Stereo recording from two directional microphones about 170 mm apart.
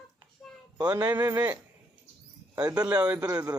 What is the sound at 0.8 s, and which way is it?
Speech, 25° right (ahead or behind).